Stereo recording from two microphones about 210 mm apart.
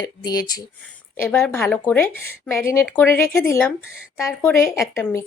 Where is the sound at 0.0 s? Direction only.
15° left (ahead or behind).